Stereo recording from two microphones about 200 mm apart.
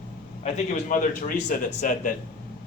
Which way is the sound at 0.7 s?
40° left (ahead or behind).